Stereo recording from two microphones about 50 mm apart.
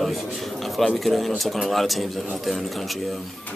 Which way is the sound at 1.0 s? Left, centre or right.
Centre.